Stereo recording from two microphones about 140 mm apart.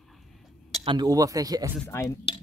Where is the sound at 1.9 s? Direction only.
20° left (ahead or behind).